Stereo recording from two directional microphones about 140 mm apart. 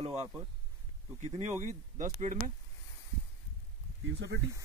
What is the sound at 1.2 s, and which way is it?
Speech, 55° right (ahead or behind).